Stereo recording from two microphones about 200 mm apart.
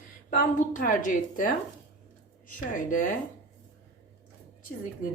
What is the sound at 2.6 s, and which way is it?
Speech, 40° left (ahead or behind).